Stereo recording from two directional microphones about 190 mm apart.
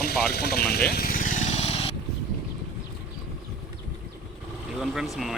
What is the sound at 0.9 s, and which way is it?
Vehicle, 50° left (ahead or behind).